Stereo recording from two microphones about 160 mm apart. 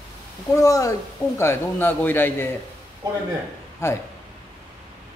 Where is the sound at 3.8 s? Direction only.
15° left (ahead or behind).